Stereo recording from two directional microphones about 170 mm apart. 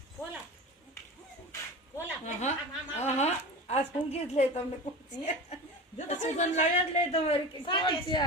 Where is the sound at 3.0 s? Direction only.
40° left (ahead or behind).